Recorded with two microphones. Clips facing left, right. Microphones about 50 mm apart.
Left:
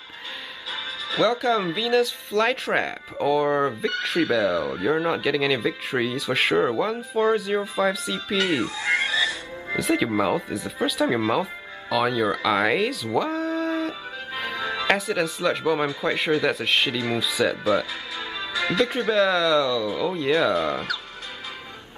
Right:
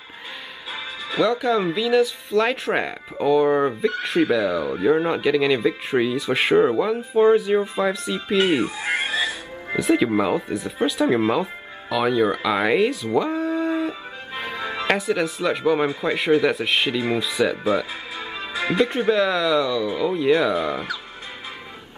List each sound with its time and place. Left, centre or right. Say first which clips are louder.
1.1 s speech: right 1 dB; centre; by 9.1 s right
9.2 s music: even; centre
9.8 s speech: right 3 dB; centre
11.9 s music: right 2 dB; centre
14.9 s speech: right 2 dB; centre
18.1 s music: even; right
19.0 s speech: right 1 dB; centre